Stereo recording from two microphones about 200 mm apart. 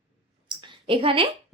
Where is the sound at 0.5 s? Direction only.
25° right (ahead or behind).